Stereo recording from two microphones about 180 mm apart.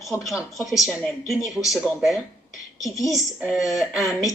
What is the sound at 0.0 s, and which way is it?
Speech, centre (ahead or behind).